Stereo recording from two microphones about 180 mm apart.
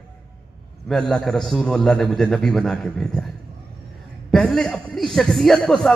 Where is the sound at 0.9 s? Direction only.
Centre (ahead or behind).